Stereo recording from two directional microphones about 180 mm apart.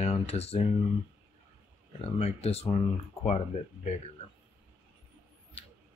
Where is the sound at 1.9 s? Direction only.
35° left (ahead or behind).